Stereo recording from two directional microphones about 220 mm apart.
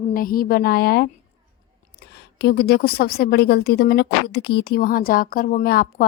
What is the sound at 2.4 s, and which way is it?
A woman's voice, 45° left (ahead or behind).